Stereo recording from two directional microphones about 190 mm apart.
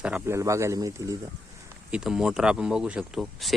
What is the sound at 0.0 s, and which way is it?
Speech, 10° right (ahead or behind).